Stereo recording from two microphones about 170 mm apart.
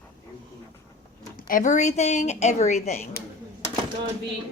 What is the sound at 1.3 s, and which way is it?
Speech, 55° left (ahead or behind).